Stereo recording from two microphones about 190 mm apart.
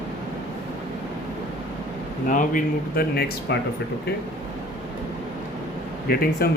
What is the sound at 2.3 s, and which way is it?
Speech, 45° left (ahead or behind).